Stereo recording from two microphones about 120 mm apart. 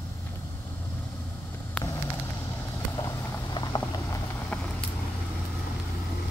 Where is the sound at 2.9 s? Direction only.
35° left (ahead or behind).